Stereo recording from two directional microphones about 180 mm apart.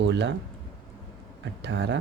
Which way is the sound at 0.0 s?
75° right (ahead or behind).